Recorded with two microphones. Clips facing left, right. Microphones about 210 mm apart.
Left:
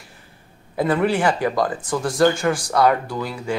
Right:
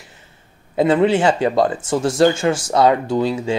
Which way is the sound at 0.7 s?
25° right (ahead or behind).